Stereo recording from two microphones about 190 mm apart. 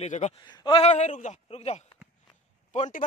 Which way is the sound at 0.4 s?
20° left (ahead or behind).